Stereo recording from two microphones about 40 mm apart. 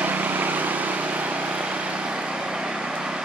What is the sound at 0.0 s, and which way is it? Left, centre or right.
Vehicle, right.